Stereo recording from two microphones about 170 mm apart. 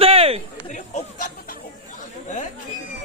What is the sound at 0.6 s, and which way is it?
Chatter, 45° left (ahead or behind).